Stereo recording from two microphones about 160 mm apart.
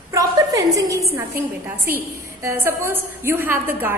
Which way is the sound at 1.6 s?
15° right (ahead or behind).